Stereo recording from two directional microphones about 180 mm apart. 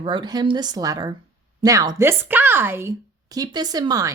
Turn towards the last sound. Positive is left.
turn(degrees=-20)  # may be behind; listen again after turning